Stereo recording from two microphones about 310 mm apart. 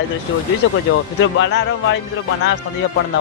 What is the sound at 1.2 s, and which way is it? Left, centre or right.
Speech, left.